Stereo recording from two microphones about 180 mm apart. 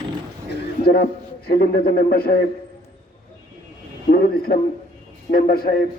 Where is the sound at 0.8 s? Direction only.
60° left (ahead or behind).